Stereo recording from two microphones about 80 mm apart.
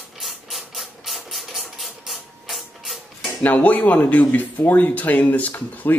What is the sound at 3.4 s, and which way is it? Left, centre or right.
A man's voice, left.